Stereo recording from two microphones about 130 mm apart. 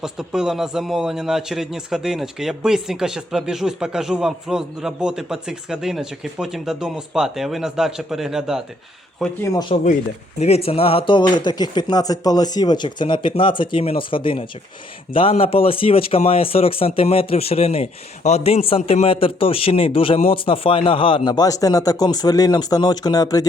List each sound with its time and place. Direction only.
0.0 s a man's voice: 5° right (ahead or behind)
9.7 s speech: 50° left (ahead or behind); by 23.5 s 30° left (ahead or behind)